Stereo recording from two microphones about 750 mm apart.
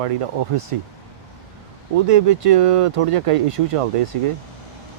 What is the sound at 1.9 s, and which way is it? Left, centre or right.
Speech, right.